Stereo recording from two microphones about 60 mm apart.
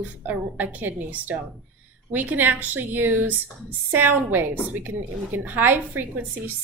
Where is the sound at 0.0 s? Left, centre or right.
Right.